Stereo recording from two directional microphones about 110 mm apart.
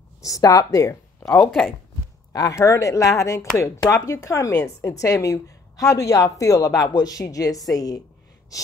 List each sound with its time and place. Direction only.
0.2 s speech: 30° left (ahead or behind)
2.3 s a woman's voice: 30° left (ahead or behind)